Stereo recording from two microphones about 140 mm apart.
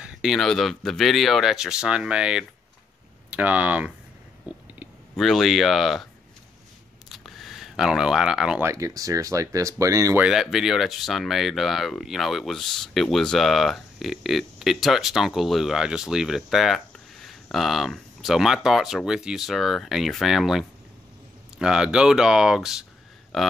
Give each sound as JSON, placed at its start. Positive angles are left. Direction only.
{"t": 0.0, "sound": "speech", "side_deg": -5}
{"t": 4.5, "sound": "a sound", "side_deg": -10}
{"t": 5.1, "sound": "speech", "side_deg": 0}
{"t": 7.1, "sound": "a sound", "side_deg": 0}
{"t": 8.6, "sound": "speech", "side_deg": -20}
{"t": 10.2, "sound": "speech", "side_deg": -5}